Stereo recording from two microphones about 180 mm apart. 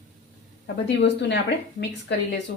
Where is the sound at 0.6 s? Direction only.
75° left (ahead or behind).